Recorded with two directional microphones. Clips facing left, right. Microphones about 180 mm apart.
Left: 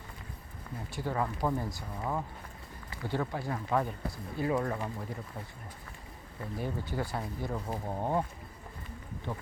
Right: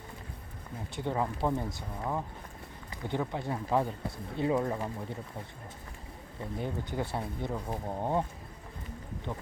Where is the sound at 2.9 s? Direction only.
20° right (ahead or behind).